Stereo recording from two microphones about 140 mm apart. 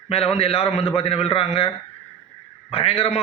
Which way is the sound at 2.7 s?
45° left (ahead or behind).